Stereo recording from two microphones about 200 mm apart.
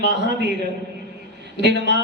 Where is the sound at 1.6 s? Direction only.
55° right (ahead or behind).